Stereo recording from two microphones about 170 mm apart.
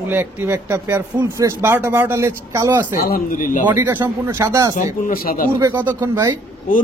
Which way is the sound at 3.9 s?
15° right (ahead or behind).